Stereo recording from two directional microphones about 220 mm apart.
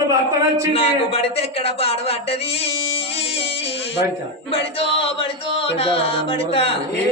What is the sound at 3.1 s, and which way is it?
Music, 25° left (ahead or behind).